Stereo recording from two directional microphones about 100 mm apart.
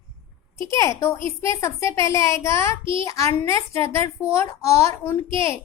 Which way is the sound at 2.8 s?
60° right (ahead or behind).